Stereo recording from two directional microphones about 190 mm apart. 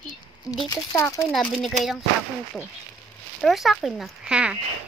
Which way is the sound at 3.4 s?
Centre (ahead or behind).